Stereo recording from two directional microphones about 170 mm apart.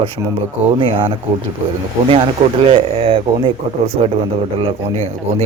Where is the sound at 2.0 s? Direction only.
30° right (ahead or behind).